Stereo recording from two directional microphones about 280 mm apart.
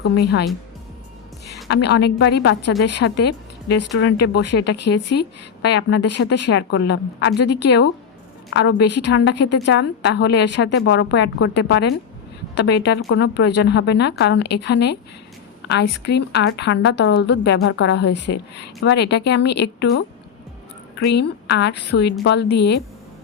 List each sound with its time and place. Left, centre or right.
0.0 s a woman's voice: left
1.7 s a woman's voice: left
21.1 s a woman's voice: left